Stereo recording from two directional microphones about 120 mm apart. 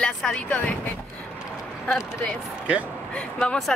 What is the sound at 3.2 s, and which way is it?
Speech, 10° left (ahead or behind).